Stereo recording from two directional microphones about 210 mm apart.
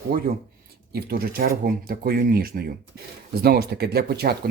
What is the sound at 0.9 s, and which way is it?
Speech, 45° right (ahead or behind).